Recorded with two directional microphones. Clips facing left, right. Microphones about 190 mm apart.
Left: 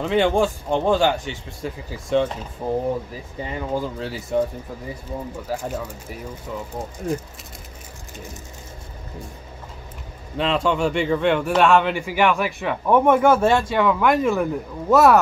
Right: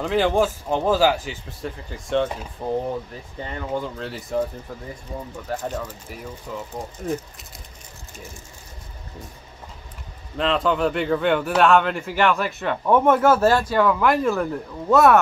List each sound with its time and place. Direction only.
0.0 s speech: centre (ahead or behind)
5.5 s speech: 10° left (ahead or behind)
10.3 s speech: centre (ahead or behind)
13.2 s speech: 5° right (ahead or behind)